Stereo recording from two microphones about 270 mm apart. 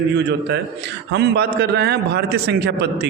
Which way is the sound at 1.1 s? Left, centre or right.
Right.